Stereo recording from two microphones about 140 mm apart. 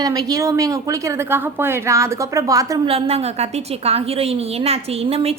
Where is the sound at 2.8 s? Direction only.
45° right (ahead or behind).